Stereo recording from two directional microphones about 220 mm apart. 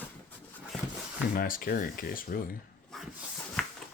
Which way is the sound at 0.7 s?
5° left (ahead or behind).